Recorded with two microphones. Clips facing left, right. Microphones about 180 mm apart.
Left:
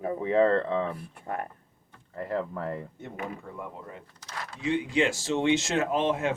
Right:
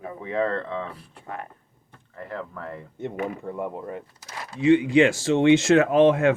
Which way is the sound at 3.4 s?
30° right (ahead or behind).